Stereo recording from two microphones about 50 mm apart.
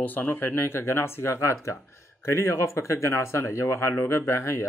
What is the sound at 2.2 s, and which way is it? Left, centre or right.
Speech, left.